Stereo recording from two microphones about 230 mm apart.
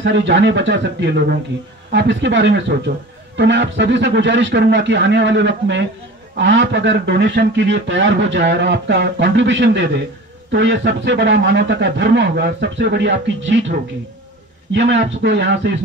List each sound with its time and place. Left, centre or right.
0.0 s a man's voice: right